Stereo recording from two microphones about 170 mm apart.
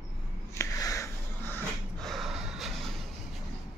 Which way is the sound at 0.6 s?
20° left (ahead or behind).